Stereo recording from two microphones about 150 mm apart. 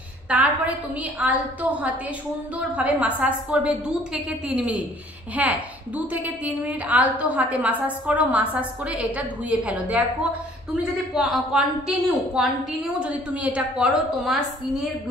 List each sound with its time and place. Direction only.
0.3 s a woman's voice: 10° right (ahead or behind)